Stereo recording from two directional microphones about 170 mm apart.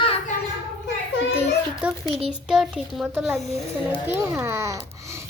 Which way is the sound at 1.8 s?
10° right (ahead or behind).